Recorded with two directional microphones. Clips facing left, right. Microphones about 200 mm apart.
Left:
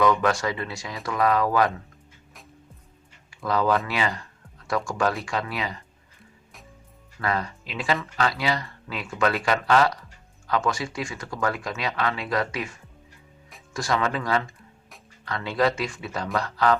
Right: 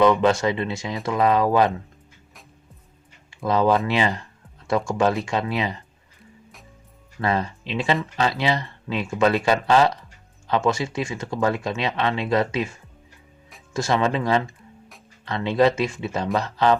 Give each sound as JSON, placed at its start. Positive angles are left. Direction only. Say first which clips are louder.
{"t": 0.0, "sound": "speech", "louder": "right 4 dB", "side_deg": -25}
{"t": 3.2, "sound": "speech", "louder": "right 4 dB", "side_deg": -25}
{"t": 7.2, "sound": "speech", "louder": "right 4 dB", "side_deg": -25}
{"t": 13.7, "sound": "speech", "louder": "right 4 dB", "side_deg": -25}